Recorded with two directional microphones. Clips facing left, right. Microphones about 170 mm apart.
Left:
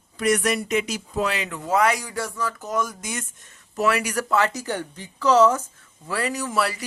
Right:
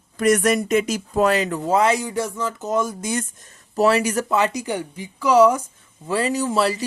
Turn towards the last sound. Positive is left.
turn(degrees=-25)  # may be behind; listen again after turning